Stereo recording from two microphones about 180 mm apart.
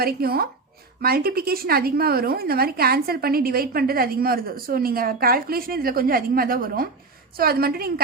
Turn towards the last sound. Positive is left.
turn(degrees=-55)  # may be behind; listen again after turning